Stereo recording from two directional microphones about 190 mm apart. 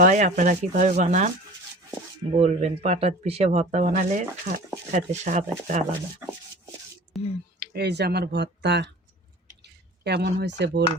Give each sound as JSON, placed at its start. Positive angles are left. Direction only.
{"t": 0.0, "sound": "speech", "side_deg": -45}
{"t": 2.3, "sound": "speech", "side_deg": -35}
{"t": 7.1, "sound": "speech", "side_deg": 0}
{"t": 7.6, "sound": "speech", "side_deg": -60}
{"t": 10.0, "sound": "speech", "side_deg": -60}